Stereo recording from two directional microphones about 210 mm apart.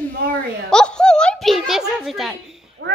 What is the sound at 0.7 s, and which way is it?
A woman's voice, 5° left (ahead or behind).